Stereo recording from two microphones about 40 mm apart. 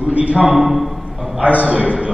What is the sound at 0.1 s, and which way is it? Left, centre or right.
Speech, right.